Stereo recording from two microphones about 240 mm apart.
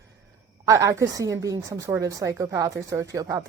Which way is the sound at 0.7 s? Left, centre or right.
Centre.